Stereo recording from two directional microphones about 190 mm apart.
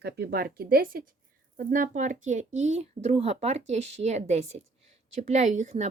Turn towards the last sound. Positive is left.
turn(degrees=-40)  # may be behind; listen again after turning